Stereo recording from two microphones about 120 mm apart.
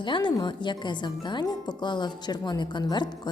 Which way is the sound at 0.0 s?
40° left (ahead or behind).